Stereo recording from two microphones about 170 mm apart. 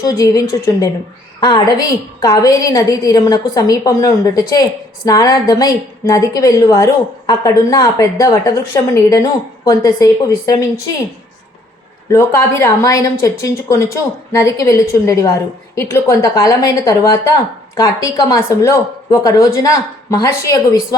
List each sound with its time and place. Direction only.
0.0 s a woman's voice: 20° left (ahead or behind)
12.1 s a woman's voice: 15° left (ahead or behind)